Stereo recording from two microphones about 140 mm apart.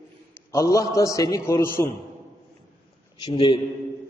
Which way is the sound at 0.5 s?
20° left (ahead or behind).